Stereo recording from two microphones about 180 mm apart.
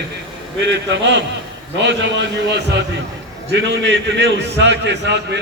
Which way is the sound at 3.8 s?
75° right (ahead or behind).